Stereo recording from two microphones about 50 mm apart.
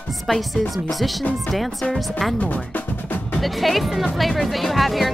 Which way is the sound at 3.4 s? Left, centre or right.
Centre.